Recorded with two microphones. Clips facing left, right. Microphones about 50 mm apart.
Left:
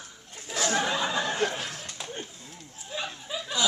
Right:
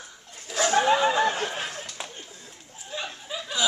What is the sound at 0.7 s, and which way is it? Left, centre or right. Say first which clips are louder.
Speech: right 8 dB; right.